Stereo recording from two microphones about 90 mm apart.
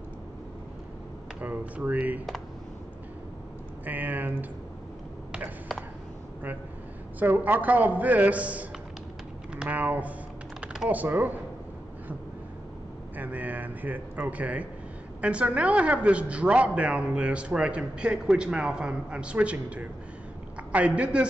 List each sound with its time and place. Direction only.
1.4 s a woman's voice: 20° right (ahead or behind)
3.8 s speech: 20° right (ahead or behind)
7.2 s a woman's voice: 20° right (ahead or behind)
10.6 s typing: 5° right (ahead or behind)
10.9 s speech: 20° right (ahead or behind)
13.2 s a woman's voice: 15° right (ahead or behind)